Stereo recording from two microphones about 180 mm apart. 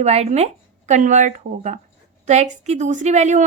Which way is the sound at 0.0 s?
35° right (ahead or behind).